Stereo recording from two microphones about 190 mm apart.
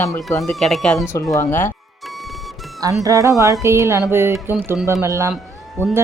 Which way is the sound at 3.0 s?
15° right (ahead or behind).